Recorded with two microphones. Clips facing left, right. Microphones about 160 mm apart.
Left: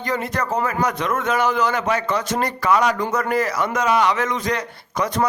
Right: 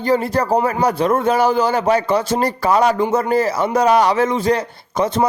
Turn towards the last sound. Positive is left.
turn(degrees=-25)  # may be behind; listen again after turning